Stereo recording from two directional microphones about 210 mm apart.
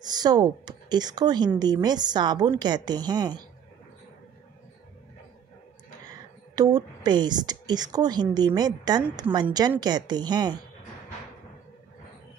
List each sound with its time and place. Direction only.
0.0 s a woman's voice: 20° right (ahead or behind)
6.0 s a woman's voice: 20° right (ahead or behind)